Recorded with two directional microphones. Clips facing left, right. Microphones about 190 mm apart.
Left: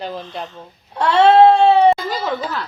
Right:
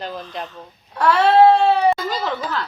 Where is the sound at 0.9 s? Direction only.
25° left (ahead or behind).